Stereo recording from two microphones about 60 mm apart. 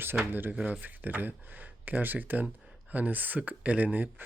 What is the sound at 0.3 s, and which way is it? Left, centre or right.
Speech, right.